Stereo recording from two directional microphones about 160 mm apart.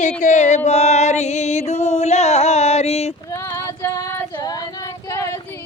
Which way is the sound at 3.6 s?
20° left (ahead or behind).